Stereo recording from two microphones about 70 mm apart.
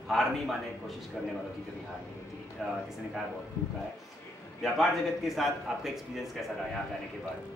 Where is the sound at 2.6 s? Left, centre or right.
Centre.